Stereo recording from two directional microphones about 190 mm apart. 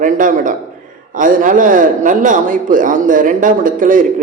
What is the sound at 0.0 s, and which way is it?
A man's voice, 45° right (ahead or behind).